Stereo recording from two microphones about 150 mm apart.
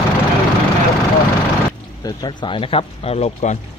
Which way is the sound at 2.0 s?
30° left (ahead or behind).